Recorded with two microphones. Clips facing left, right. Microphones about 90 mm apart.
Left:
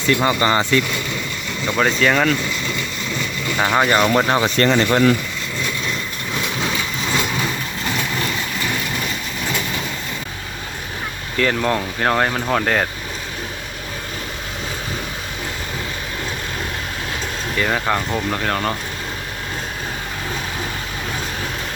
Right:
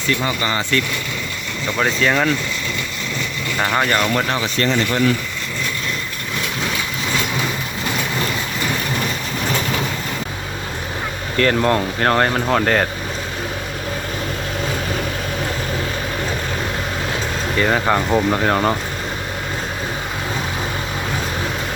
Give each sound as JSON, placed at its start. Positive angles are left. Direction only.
{"t": 0.2, "sound": "speech", "side_deg": 40}
{"t": 1.6, "sound": "speech", "side_deg": 0}
{"t": 3.6, "sound": "speech", "side_deg": 5}
{"t": 4.6, "sound": "speech", "side_deg": 50}
{"t": 11.3, "sound": "speech", "side_deg": 5}
{"t": 17.6, "sound": "speech", "side_deg": -10}